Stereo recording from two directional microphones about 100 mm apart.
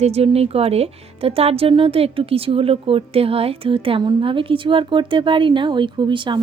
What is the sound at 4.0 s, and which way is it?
Speech, 55° right (ahead or behind).